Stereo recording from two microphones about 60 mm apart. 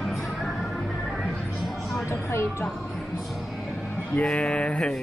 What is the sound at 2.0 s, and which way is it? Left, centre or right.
Speech, left.